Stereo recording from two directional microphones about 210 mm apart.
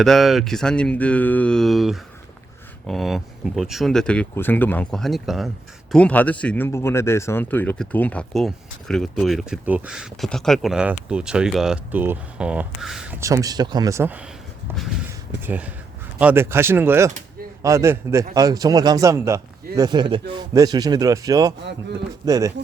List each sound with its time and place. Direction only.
0.0 s speech: centre (ahead or behind)
15.4 s a man's voice: 5° right (ahead or behind)